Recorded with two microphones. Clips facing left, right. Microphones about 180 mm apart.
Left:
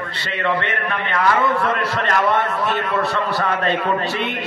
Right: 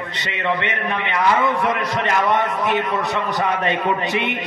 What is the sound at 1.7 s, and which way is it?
A man's voice, 15° right (ahead or behind).